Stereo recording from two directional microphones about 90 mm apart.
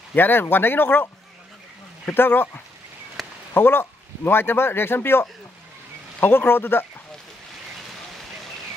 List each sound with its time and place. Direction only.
0.1 s speech: 20° left (ahead or behind)
3.2 s a sound: centre (ahead or behind)
3.5 s speech: 25° left (ahead or behind)